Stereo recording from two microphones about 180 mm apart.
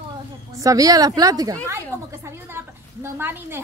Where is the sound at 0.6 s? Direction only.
20° right (ahead or behind).